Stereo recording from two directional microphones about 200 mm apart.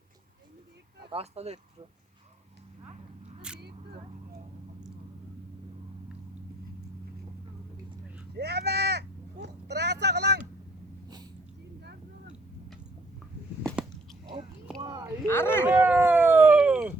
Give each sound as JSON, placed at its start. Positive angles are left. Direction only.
{"t": 1.1, "sound": "speech", "side_deg": -30}
{"t": 3.5, "sound": "single-lens reflex camera", "side_deg": -5}
{"t": 8.4, "sound": "sheep", "side_deg": -55}
{"t": 14.8, "sound": "a sound", "side_deg": -15}
{"t": 15.3, "sound": "speech", "side_deg": 10}
{"t": 15.6, "sound": "a sound", "side_deg": -10}